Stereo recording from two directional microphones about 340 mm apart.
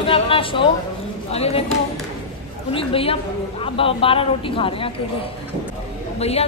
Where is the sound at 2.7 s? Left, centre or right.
Centre.